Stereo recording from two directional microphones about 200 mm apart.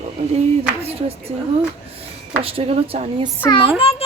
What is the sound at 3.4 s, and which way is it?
Speech, 25° left (ahead or behind).